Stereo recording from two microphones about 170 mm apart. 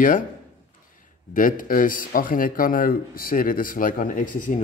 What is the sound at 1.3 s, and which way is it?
Speech, 55° left (ahead or behind).